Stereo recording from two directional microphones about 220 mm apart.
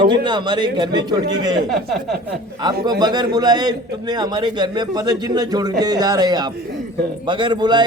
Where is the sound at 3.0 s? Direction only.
20° right (ahead or behind).